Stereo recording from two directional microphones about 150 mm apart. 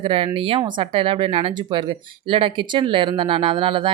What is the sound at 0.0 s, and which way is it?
Speech, 35° right (ahead or behind).